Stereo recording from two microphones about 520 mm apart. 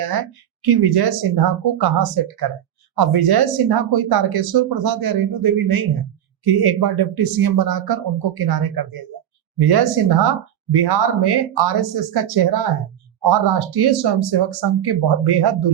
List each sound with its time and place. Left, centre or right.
0.0 s speech: right